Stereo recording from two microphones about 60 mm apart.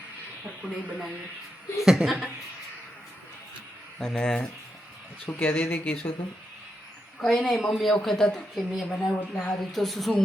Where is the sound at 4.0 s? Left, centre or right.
Centre.